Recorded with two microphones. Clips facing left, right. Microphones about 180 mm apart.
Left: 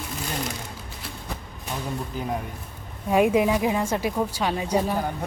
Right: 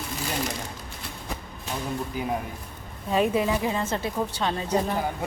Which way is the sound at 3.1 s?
15° left (ahead or behind).